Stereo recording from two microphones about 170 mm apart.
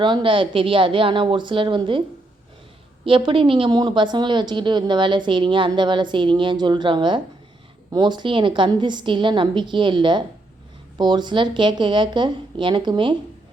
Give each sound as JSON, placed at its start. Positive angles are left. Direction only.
{"t": 0.0, "sound": "a woman's voice", "side_deg": -30}